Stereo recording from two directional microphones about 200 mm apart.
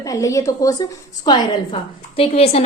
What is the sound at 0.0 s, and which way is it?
A woman's voice, 15° left (ahead or behind).